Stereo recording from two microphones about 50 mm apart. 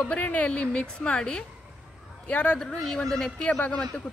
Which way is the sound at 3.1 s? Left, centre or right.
Centre.